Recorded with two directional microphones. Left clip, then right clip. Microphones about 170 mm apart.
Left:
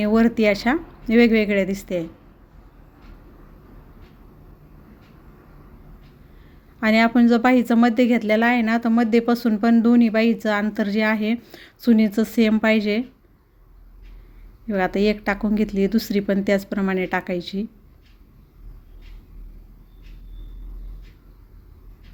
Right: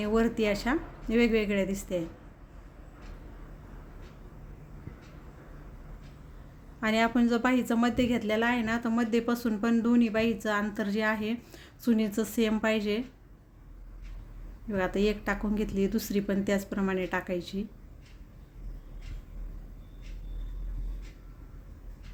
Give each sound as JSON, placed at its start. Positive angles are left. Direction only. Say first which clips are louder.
{"t": 0.0, "sound": "a woman's voice", "louder": "left 9 dB", "side_deg": 35}
{"t": 6.7, "sound": "a woman's voice", "louder": "left 9 dB", "side_deg": 35}
{"t": 14.7, "sound": "a woman's voice", "louder": "left 8 dB", "side_deg": 30}